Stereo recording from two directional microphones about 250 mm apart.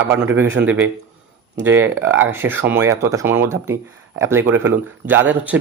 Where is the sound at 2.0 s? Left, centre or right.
Right.